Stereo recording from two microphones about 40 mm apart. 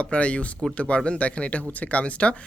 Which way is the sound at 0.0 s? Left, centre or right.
Left.